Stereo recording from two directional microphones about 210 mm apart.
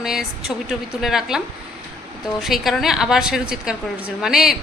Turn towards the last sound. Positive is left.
turn(degrees=0)  # may be behind; listen again after turning